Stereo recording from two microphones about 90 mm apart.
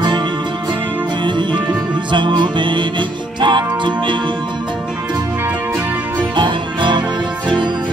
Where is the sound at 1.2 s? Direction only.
60° right (ahead or behind).